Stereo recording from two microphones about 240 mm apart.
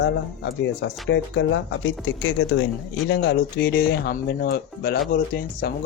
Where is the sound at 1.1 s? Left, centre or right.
Left.